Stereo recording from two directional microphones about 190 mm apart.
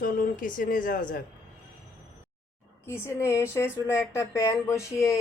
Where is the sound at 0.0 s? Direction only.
45° left (ahead or behind).